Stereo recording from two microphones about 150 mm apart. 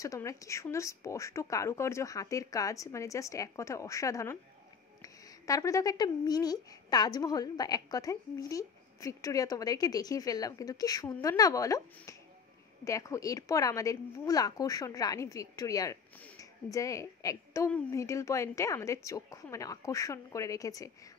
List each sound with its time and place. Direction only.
0.0 s a woman's voice: 20° left (ahead or behind)
17.6 s speech: 10° left (ahead or behind)
18.0 s speech: 20° left (ahead or behind)